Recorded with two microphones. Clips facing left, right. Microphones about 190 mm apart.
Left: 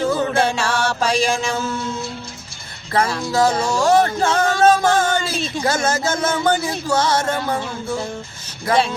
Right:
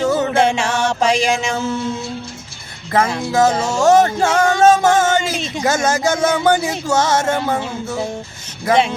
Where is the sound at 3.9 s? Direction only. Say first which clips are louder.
Right 3 dB; 20° right (ahead or behind).